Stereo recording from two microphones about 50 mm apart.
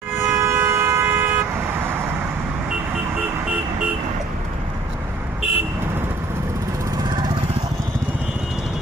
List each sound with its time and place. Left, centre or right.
0.1 s vehicle: right